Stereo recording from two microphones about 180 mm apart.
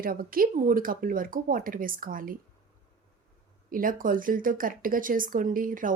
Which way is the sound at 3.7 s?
50° right (ahead or behind).